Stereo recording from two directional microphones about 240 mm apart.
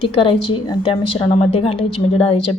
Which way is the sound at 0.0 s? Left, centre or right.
Left.